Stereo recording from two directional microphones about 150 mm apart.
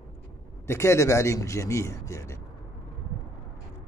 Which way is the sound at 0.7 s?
20° left (ahead or behind).